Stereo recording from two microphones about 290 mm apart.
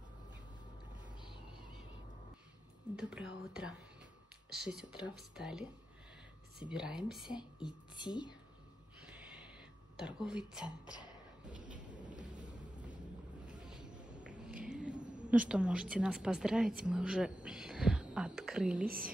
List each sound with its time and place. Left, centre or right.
3.0 s a woman's voice: centre
5.0 s a woman's voice: centre
7.6 s speech: centre
9.9 s a woman's voice: centre
11.5 s thunder: right
13.5 s a sound: centre
15.0 s a sound: centre
15.2 s a woman's voice: centre